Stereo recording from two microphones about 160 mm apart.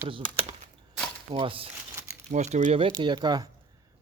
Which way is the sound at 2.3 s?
45° right (ahead or behind).